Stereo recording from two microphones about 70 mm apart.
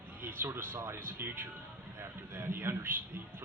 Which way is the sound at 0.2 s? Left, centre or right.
Right.